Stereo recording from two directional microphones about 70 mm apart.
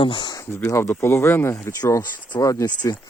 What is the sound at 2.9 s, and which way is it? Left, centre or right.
Speech, left.